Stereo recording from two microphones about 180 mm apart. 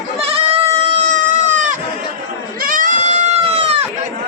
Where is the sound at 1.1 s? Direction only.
45° right (ahead or behind).